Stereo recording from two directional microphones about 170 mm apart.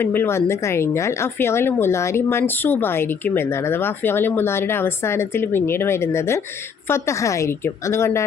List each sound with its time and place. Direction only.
0.0 s a woman's voice: 10° left (ahead or behind)